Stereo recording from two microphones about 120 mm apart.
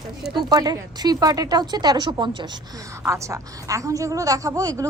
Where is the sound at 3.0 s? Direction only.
25° right (ahead or behind).